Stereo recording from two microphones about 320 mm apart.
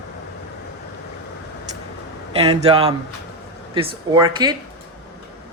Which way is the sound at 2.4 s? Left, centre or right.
Centre.